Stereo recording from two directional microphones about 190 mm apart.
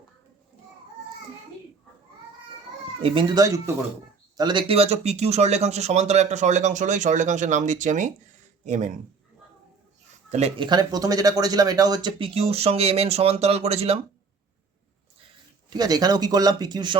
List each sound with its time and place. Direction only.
3.0 s speech: 25° right (ahead or behind)
10.3 s speech: 35° right (ahead or behind)
10.7 s speech: 20° right (ahead or behind)
15.7 s speech: 20° right (ahead or behind)